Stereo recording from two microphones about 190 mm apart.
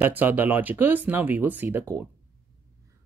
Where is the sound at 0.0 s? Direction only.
10° right (ahead or behind).